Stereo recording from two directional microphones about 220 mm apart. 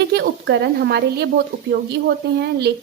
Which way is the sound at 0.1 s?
50° right (ahead or behind).